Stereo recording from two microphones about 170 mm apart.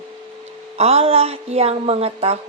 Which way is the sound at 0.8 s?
35° right (ahead or behind).